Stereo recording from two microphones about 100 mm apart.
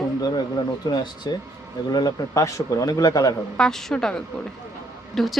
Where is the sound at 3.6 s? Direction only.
5° left (ahead or behind).